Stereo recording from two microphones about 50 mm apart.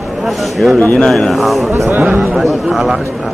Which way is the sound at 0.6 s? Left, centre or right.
Left.